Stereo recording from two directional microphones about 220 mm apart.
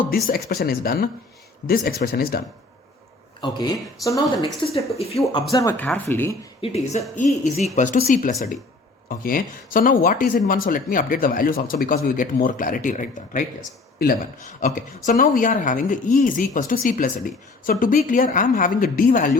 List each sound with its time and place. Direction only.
0.1 s speech: 45° left (ahead or behind)
3.4 s speech: 15° left (ahead or behind)
6.6 s a woman's voice: 30° left (ahead or behind)